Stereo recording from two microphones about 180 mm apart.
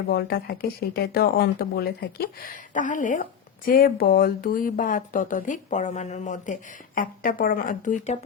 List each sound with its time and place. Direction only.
0.1 s speech: 60° left (ahead or behind); by 8.2 s 45° left (ahead or behind)